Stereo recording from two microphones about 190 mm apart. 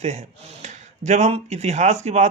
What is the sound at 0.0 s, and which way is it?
Speech, 35° right (ahead or behind).